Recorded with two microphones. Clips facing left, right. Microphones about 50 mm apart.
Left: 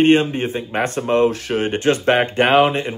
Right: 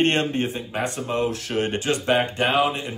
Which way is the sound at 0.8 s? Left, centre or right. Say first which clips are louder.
Left 8 dB; left.